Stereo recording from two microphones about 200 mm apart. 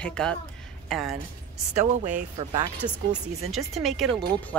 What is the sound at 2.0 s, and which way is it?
Speech, 35° right (ahead or behind).